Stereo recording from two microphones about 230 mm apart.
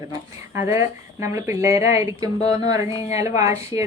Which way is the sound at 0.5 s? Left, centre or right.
Centre.